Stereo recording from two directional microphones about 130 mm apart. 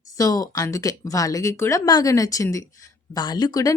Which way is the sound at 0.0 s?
25° left (ahead or behind).